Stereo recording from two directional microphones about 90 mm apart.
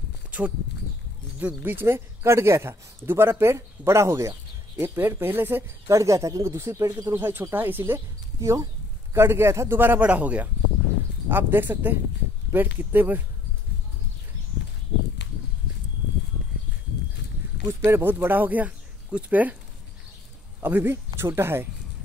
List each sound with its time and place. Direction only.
1.4 s a man's voice: 20° right (ahead or behind)
5.9 s speech: 35° right (ahead or behind)
7.2 s a man's voice: 25° right (ahead or behind)
17.6 s speech: 25° right (ahead or behind)
20.6 s a man's voice: 25° right (ahead or behind)